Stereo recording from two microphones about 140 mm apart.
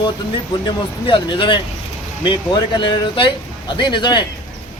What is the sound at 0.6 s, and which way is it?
Speech, 35° left (ahead or behind).